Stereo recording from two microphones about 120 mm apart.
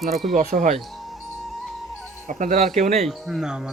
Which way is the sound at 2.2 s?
90° right.